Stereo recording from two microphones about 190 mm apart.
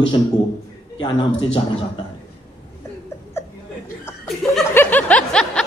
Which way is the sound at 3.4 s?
15° left (ahead or behind).